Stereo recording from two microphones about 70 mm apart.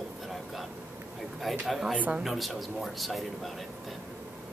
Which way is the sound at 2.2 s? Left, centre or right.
Centre.